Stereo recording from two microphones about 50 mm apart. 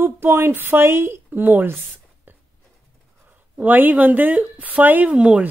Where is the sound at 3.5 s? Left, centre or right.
Right.